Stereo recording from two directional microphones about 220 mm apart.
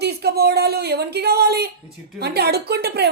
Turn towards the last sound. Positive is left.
turn(degrees=-45)  # may be behind; listen again after turning